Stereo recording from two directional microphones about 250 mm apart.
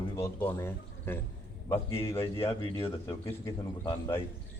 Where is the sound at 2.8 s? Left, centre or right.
Centre.